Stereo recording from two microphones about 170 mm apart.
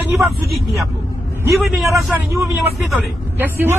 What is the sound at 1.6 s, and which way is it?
Speech, centre (ahead or behind).